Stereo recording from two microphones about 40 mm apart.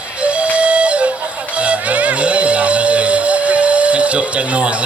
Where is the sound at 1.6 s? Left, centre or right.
Right.